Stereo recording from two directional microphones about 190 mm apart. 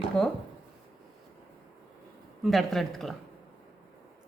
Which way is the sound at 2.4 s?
Centre (ahead or behind).